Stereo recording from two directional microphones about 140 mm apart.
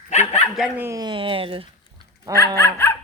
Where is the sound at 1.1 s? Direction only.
40° right (ahead or behind).